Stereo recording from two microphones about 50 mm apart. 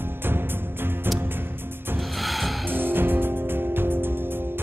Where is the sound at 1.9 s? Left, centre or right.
Centre.